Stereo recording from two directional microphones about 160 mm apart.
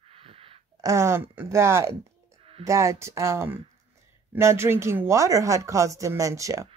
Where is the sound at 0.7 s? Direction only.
20° right (ahead or behind).